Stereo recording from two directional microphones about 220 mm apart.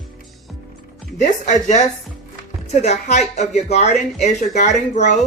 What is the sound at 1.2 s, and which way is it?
A woman's voice, 35° left (ahead or behind).